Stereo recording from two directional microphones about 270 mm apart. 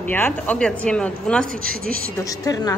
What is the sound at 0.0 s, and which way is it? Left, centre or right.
Speech, centre.